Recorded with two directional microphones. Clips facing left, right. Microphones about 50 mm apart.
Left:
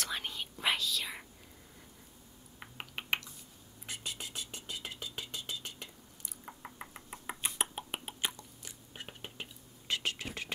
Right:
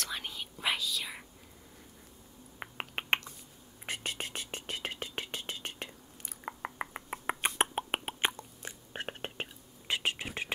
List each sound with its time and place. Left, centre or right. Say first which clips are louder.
0.0 s whispering: left 1 dB; centre
2.6 s a sound: right 5 dB; right
3.8 s whispering: right 5 dB; right
7.7 s beatboxing: right 7 dB; right
8.3 s chewing: right 6 dB; right
8.9 s whispering: right 7 dB; right
9.8 s whispering: right 3 dB; right